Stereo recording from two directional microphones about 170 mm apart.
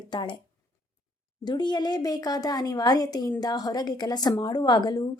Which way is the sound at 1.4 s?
25° left (ahead or behind).